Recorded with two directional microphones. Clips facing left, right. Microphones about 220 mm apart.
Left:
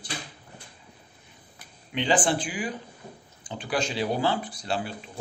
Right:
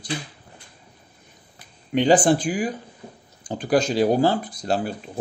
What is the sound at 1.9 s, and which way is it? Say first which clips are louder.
Speech: right 8 dB; 40° right (ahead or behind).